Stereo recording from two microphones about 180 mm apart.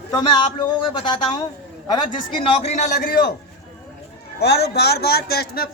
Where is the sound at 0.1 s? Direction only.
25° left (ahead or behind); by 3.3 s 60° left (ahead or behind).